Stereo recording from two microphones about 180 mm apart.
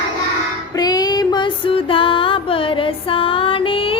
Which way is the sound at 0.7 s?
20° left (ahead or behind).